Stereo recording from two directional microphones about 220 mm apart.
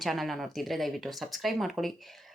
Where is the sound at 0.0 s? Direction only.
Centre (ahead or behind).